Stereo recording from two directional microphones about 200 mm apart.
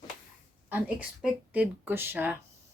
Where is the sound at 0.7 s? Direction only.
5° right (ahead or behind).